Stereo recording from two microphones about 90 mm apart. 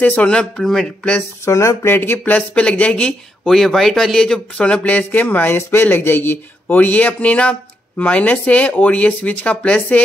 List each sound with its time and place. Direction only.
0.0 s a man's voice: 15° left (ahead or behind)
1.4 s speech: 35° left (ahead or behind); by 3.2 s 15° left (ahead or behind)
3.4 s a man's voice: centre (ahead or behind)